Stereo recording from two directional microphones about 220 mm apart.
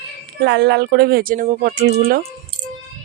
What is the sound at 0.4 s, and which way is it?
Speech, 50° right (ahead or behind).